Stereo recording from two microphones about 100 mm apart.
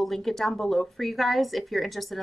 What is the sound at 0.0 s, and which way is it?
A woman's voice, centre (ahead or behind).